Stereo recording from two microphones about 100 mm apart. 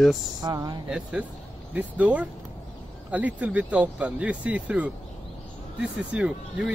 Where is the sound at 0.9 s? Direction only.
10° right (ahead or behind).